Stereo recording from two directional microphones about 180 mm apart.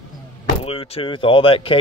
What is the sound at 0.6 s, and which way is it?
Speech, 30° left (ahead or behind).